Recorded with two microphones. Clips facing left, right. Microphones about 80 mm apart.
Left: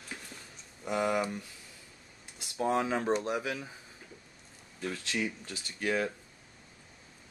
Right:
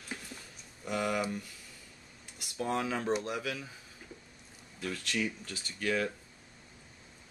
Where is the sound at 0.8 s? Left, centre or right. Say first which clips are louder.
Left 2 dB; left.